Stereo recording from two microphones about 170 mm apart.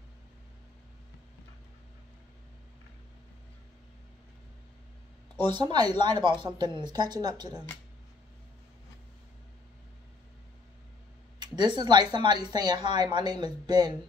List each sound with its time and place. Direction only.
5.4 s speech: 25° right (ahead or behind)
11.3 s speech: 25° right (ahead or behind)